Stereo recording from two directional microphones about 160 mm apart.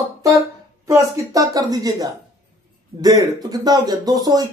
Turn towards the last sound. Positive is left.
turn(degrees=-25)  # may be behind; listen again after turning